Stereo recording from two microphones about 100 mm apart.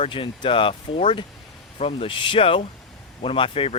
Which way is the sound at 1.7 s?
75° left (ahead or behind).